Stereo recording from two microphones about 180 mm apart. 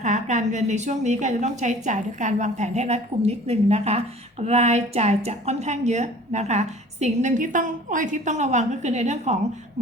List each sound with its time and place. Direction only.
0.0 s a woman's voice: 40° right (ahead or behind)